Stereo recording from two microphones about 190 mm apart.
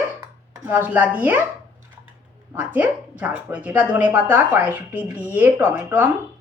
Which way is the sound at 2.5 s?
10° right (ahead or behind).